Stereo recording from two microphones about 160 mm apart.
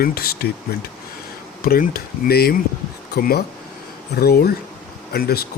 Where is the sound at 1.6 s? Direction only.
65° left (ahead or behind).